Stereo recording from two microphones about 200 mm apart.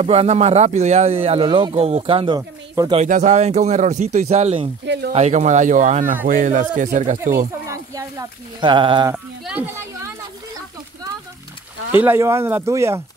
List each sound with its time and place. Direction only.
0.0 s speech: 30° right (ahead or behind)
2.8 s speech: 15° right (ahead or behind)
3.1 s speech: 35° right (ahead or behind)
4.8 s speech: 60° right (ahead or behind)
5.1 s speech: 35° right (ahead or behind)
7.6 s speech: 15° right (ahead or behind)
9.1 s a sound: 5° right (ahead or behind)
11.9 s speech: 10° right (ahead or behind)